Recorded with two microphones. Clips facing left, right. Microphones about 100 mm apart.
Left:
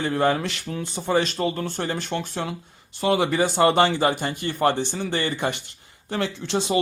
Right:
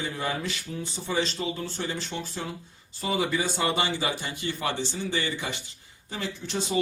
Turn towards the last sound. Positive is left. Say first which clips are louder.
# left 5 dB
turn(degrees=85)